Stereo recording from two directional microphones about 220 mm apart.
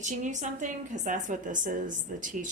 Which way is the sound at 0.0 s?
35° right (ahead or behind).